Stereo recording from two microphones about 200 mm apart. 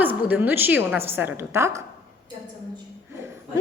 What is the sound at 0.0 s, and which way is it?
A woman's voice, 10° right (ahead or behind).